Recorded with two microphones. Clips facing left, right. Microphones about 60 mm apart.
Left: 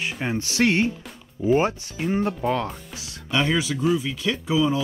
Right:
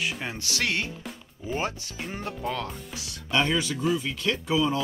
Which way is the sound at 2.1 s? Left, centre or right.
Centre.